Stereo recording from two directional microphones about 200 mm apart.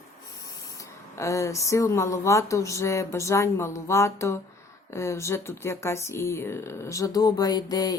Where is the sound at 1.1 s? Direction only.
15° left (ahead or behind).